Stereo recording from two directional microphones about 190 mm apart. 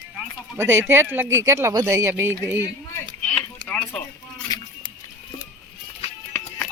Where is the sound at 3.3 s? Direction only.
5° left (ahead or behind).